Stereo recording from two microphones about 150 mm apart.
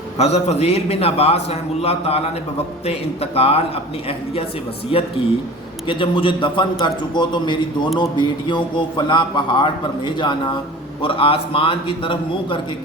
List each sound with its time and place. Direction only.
0.2 s a man's voice: 45° left (ahead or behind)
4.9 s speech: 35° left (ahead or behind)